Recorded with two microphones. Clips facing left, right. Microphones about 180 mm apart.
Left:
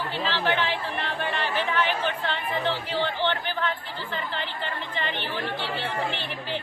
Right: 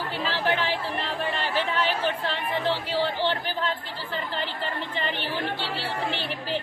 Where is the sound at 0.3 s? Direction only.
40° right (ahead or behind).